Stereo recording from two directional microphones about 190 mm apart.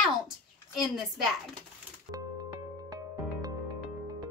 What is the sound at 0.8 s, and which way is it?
Speech, centre (ahead or behind).